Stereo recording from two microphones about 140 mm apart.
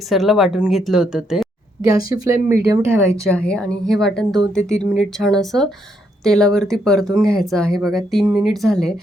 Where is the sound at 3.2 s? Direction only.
5° left (ahead or behind).